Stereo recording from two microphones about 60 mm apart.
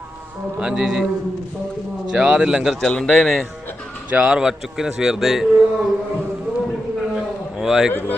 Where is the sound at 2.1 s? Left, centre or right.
Centre.